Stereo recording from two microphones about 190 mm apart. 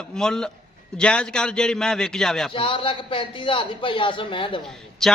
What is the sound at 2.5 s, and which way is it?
A man's voice, 25° left (ahead or behind).